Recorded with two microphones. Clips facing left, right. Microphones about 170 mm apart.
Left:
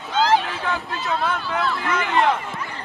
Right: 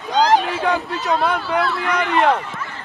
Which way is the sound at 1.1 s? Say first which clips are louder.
Right 5 dB; 40° right (ahead or behind).